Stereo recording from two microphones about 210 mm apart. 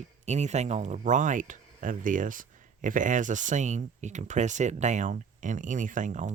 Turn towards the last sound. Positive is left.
turn(degrees=-35)  # may be behind; listen again after turning